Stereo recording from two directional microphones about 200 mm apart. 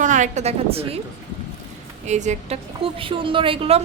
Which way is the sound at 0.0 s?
40° right (ahead or behind).